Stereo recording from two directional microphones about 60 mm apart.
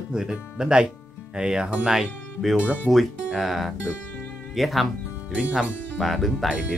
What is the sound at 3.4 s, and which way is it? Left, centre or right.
Speech, centre.